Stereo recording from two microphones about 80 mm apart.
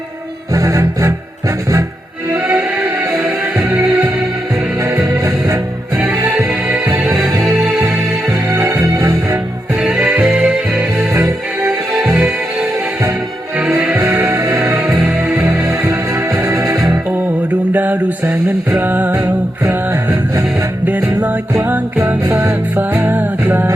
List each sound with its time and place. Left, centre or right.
0.5 s music: right
2.3 s music: centre
6.0 s music: centre
6.9 s music: centre
8.5 s music: right
9.8 s music: centre
13.6 s music: centre
14.2 s music: right
15.0 s music: centre
15.9 s music: right
17.7 s music: right
19.1 s music: right
20.8 s music: centre